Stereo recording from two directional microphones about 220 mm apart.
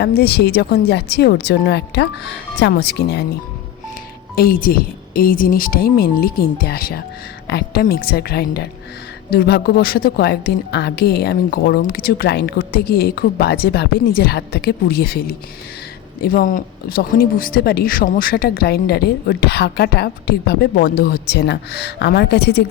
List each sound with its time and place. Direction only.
0.0 s speech: 45° left (ahead or behind)
4.4 s speech: 40° left (ahead or behind)